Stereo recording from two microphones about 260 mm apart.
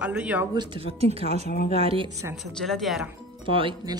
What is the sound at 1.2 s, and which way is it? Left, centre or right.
Speech, left.